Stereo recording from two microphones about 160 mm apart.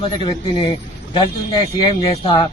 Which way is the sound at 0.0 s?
30° left (ahead or behind).